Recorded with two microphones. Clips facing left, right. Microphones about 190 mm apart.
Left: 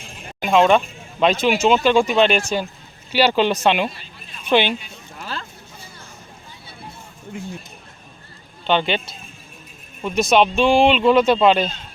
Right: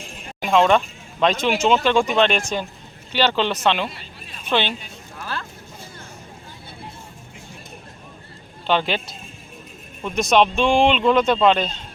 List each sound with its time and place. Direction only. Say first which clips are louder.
0.4 s speech: left 2 dB; 5° left (ahead or behind)
5.2 s a sound: right 1 dB; 25° left (ahead or behind)
8.6 s speech: left 1 dB; centre (ahead or behind)